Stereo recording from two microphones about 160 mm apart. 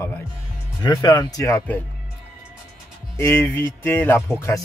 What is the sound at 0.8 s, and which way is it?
Speech, 25° left (ahead or behind).